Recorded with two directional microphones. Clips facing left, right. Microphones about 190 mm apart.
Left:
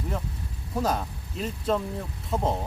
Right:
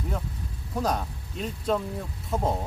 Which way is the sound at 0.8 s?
Centre (ahead or behind).